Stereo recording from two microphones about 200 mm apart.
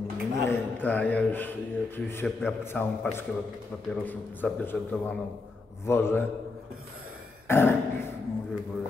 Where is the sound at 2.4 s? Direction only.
10° left (ahead or behind).